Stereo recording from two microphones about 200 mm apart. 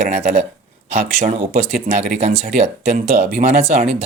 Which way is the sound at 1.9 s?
35° right (ahead or behind).